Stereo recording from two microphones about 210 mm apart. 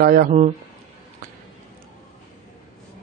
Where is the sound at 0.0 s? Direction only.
45° right (ahead or behind).